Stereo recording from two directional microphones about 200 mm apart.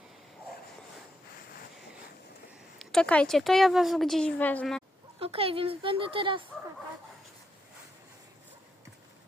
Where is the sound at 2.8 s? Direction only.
5° left (ahead or behind).